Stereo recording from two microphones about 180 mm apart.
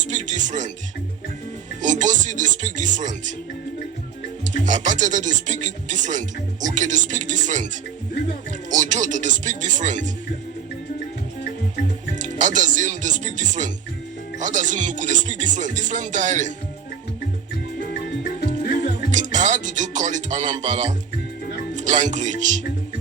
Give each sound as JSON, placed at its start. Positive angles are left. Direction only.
{"t": 0.0, "sound": "speech", "side_deg": -45}
{"t": 1.8, "sound": "speech", "side_deg": -45}
{"t": 4.4, "sound": "speech", "side_deg": -45}
{"t": 8.7, "sound": "speech", "side_deg": -45}
{"t": 12.2, "sound": "speech", "side_deg": -45}
{"t": 19.1, "sound": "speech", "side_deg": -45}